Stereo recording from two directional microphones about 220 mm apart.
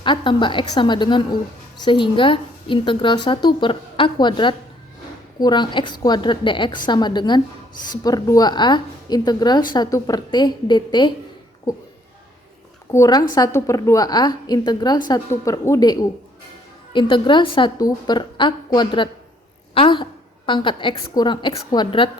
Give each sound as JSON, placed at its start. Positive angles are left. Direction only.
{"t": 0.0, "sound": "a woman's voice", "side_deg": 20}
{"t": 12.9, "sound": "a woman's voice", "side_deg": 15}